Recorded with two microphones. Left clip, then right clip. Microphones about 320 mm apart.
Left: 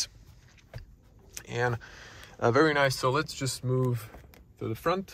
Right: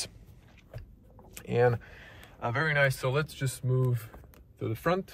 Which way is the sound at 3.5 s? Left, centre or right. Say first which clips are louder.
Left 3 dB; left.